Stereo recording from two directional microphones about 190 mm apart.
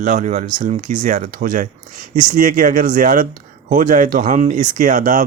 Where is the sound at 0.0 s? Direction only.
45° right (ahead or behind).